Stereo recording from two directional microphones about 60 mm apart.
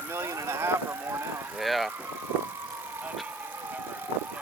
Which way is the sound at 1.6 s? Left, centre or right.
Centre.